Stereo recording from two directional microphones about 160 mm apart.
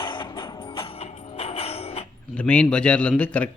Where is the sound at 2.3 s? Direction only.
5° left (ahead or behind).